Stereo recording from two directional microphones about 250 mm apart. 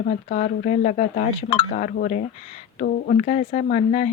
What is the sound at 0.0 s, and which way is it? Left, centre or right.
Speech, left.